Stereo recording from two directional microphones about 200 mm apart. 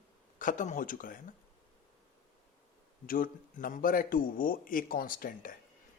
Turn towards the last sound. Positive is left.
turn(degrees=45)  # may be behind; listen again after turning